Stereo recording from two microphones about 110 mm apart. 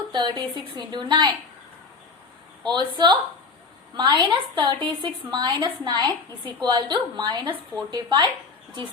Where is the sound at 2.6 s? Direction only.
45° right (ahead or behind).